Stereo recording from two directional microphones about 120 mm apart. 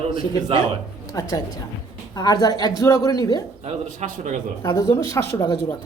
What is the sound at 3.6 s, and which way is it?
Speech, 75° right (ahead or behind).